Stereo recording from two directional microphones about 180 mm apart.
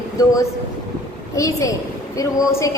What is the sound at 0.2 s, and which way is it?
Speech, 20° left (ahead or behind).